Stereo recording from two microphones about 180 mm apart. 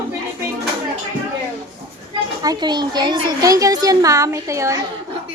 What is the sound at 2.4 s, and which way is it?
Speech, 25° right (ahead or behind).